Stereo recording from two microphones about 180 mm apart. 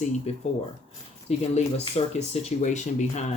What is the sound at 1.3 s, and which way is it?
Speech, 35° left (ahead or behind).